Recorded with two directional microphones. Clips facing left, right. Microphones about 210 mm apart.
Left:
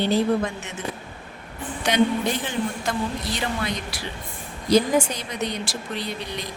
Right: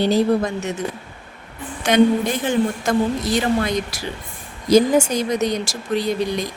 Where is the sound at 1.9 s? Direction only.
50° right (ahead or behind).